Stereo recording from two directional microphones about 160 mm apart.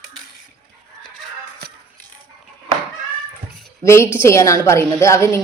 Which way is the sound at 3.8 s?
15° left (ahead or behind).